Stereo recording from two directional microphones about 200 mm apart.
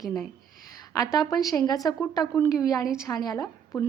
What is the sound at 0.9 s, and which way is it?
A woman's voice, 20° left (ahead or behind).